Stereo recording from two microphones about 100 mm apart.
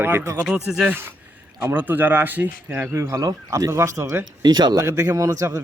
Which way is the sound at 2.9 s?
30° right (ahead or behind).